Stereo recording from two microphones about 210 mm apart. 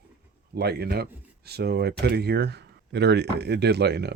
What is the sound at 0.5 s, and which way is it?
Speech, 50° right (ahead or behind).